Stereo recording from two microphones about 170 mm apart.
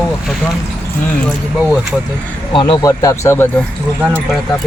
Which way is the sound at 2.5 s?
30° left (ahead or behind).